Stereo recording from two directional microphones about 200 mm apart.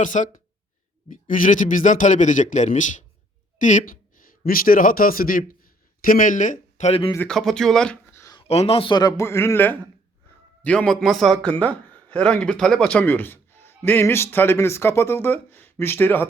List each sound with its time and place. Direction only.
0.0 s a man's voice: 40° left (ahead or behind)
7.3 s speech: centre (ahead or behind)
8.4 s a man's voice: 30° left (ahead or behind); by 16.3 s 10° left (ahead or behind)